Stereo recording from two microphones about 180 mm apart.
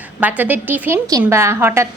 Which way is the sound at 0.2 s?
10° right (ahead or behind).